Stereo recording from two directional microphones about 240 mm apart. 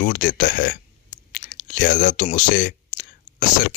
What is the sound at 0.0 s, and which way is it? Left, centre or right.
Speech, left.